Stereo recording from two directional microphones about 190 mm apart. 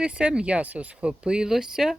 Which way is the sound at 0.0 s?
5° right (ahead or behind).